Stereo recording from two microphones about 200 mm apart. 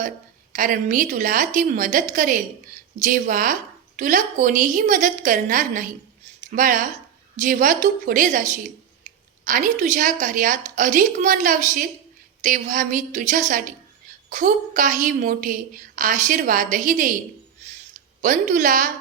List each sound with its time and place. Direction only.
0.5 s a woman's voice: 45° right (ahead or behind)
18.2 s a woman's voice: 40° right (ahead or behind)